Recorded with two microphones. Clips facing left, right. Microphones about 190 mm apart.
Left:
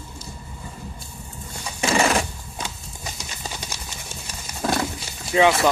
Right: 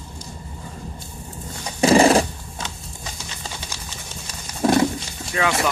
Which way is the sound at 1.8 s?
35° right (ahead or behind).